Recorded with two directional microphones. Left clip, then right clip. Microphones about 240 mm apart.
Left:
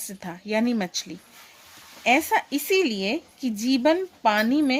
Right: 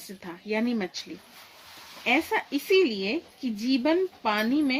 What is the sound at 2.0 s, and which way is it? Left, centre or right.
Speech, left.